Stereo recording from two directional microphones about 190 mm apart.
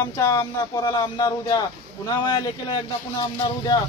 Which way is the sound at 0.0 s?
15° left (ahead or behind).